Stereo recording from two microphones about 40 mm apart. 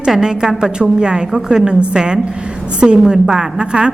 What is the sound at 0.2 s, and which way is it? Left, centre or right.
A woman's voice, centre.